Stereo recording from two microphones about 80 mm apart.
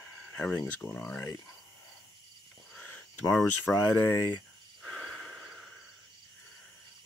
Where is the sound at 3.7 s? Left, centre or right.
Left.